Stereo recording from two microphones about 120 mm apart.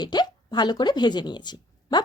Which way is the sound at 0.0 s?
35° left (ahead or behind).